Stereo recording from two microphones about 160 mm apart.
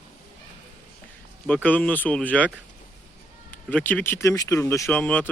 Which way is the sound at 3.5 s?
10° left (ahead or behind).